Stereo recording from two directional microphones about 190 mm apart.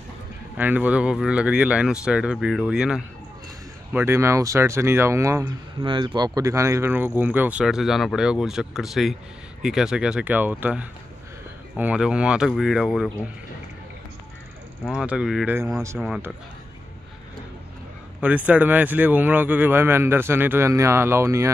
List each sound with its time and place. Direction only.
0.6 s speech: 10° right (ahead or behind)
5.8 s speech: 25° right (ahead or behind); by 13.1 s centre (ahead or behind)
14.9 s speech: 5° right (ahead or behind)
18.2 s speech: 10° right (ahead or behind)